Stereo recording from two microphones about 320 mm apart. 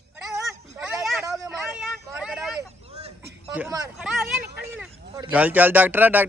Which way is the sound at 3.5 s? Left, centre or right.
Centre.